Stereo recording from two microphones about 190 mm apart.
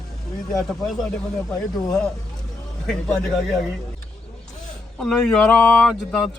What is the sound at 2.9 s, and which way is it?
Speech, 5° left (ahead or behind).